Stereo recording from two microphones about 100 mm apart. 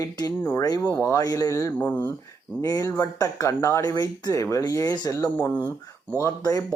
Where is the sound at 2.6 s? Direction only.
35° left (ahead or behind).